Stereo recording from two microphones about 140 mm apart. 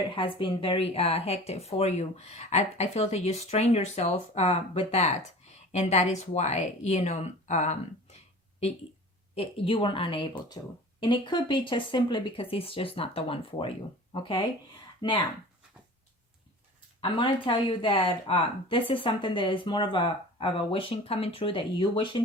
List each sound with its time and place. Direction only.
0.2 s speech: 35° left (ahead or behind); by 7.8 s 50° left (ahead or behind)
9.3 s speech: 45° left (ahead or behind)
17.0 s speech: 35° left (ahead or behind)